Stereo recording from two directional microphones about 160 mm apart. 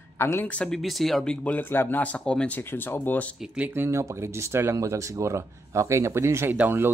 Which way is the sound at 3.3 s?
5° right (ahead or behind).